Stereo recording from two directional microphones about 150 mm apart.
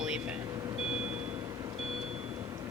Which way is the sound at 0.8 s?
10° right (ahead or behind).